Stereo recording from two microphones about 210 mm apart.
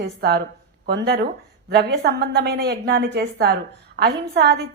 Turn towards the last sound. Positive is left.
turn(degrees=-50)  # may be behind; listen again after turning